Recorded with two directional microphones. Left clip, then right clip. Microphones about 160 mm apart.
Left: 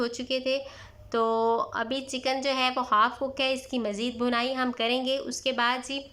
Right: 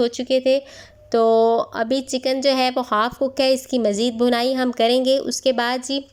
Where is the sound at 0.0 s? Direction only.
25° right (ahead or behind).